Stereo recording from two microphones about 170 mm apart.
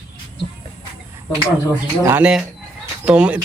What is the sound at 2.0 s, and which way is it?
A man's voice, 10° right (ahead or behind).